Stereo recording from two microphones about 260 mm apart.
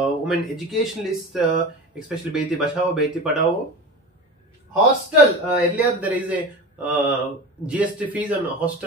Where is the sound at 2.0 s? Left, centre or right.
Centre.